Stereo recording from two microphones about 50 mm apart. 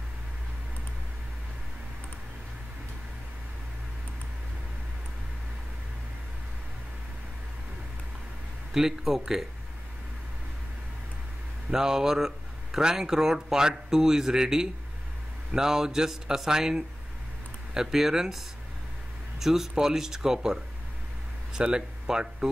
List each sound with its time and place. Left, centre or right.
8.7 s speech: centre
11.7 s speech: centre
19.4 s speech: centre